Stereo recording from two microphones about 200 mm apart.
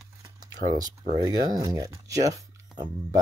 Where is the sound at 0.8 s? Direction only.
20° right (ahead or behind).